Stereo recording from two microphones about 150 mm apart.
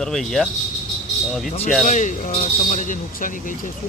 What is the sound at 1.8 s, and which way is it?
Speech, 55° left (ahead or behind).